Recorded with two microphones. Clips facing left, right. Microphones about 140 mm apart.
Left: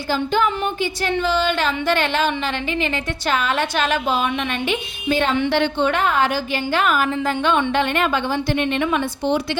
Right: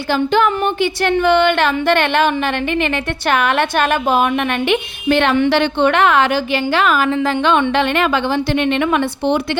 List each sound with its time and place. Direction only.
0.1 s a woman's voice: 70° right (ahead or behind); by 4.3 s 55° right (ahead or behind)
4.7 s a woman's voice: 70° right (ahead or behind)